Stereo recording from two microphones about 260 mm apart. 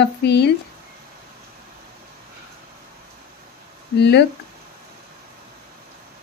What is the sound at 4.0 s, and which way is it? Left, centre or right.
Speech, left.